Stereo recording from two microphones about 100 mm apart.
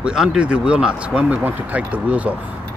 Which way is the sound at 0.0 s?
5° right (ahead or behind).